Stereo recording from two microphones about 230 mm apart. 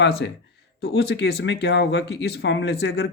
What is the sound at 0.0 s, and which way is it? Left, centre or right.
Speech, left.